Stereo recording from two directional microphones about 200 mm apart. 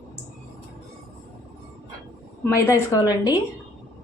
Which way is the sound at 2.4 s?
15° left (ahead or behind).